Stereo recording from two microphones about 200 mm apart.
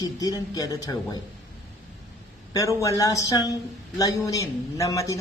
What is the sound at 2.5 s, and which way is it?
Speech, 15° left (ahead or behind).